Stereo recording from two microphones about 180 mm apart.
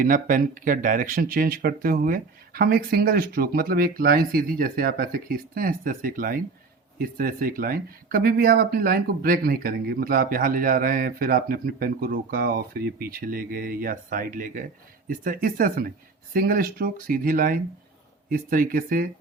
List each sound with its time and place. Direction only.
0.0 s speech: 50° right (ahead or behind)